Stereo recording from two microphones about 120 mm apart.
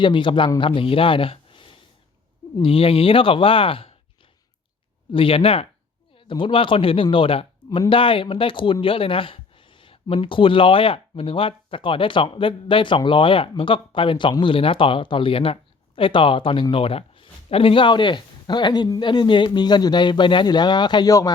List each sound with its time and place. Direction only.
0.0 s speech: 45° left (ahead or behind)
5.1 s speech: 50° left (ahead or behind); by 21.3 s 30° left (ahead or behind)